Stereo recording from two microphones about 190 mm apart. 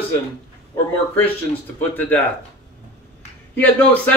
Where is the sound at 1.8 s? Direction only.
10° left (ahead or behind).